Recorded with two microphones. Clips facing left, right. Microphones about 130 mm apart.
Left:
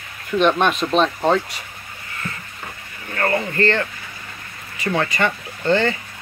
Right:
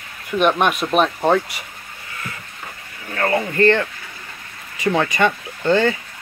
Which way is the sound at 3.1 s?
10° right (ahead or behind).